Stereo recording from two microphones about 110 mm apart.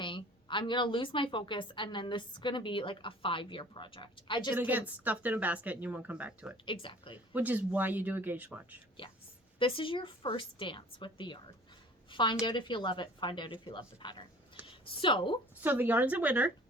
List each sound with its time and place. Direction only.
0.0 s a woman's voice: 50° left (ahead or behind)
4.5 s speech: 15° right (ahead or behind)
6.7 s a woman's voice: 50° left (ahead or behind)
7.3 s speech: 15° right (ahead or behind)
9.6 s a woman's voice: 50° left (ahead or behind)
15.6 s speech: 15° right (ahead or behind)